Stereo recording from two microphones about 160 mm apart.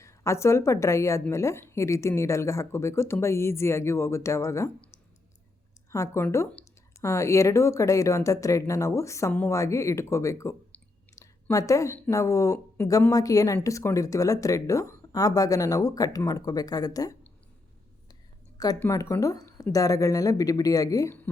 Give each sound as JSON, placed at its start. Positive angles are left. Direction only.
{"t": 0.0, "sound": "a woman's voice", "side_deg": 20}
{"t": 5.9, "sound": "speech", "side_deg": 15}
{"t": 18.5, "sound": "a sound", "side_deg": 25}
{"t": 18.8, "sound": "speech", "side_deg": 20}